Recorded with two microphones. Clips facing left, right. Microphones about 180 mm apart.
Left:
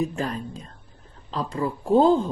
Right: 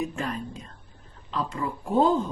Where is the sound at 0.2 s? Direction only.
35° left (ahead or behind).